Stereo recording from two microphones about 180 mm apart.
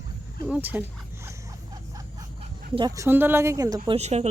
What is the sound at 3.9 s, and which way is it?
Speech, 35° right (ahead or behind).